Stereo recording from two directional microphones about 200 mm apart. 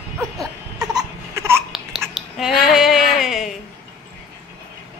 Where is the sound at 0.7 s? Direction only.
15° right (ahead or behind).